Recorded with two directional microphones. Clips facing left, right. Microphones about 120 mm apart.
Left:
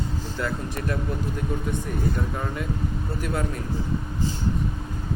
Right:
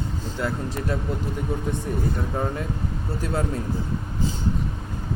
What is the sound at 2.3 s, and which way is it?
Speech, 30° right (ahead or behind).